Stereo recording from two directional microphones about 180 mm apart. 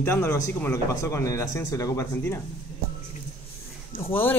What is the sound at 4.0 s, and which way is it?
Speech, 10° left (ahead or behind).